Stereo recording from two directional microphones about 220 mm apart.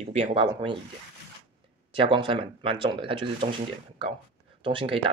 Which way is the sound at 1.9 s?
20° right (ahead or behind).